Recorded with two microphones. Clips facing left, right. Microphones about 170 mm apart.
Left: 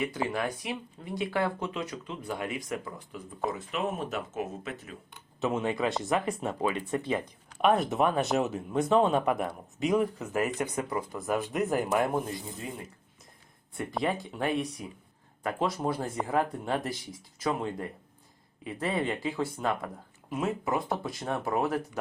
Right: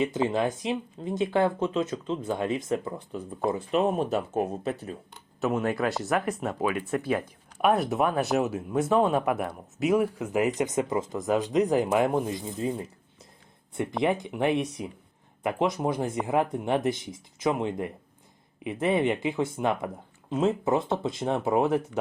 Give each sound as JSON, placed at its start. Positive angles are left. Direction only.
{"t": 0.0, "sound": "speech", "side_deg": -20}
{"t": 5.4, "sound": "speech", "side_deg": 0}
{"t": 14.0, "sound": "speech", "side_deg": -20}